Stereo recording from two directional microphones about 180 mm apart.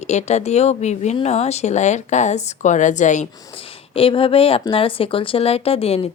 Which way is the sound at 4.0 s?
30° left (ahead or behind).